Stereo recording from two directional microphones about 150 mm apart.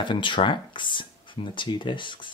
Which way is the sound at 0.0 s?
30° left (ahead or behind).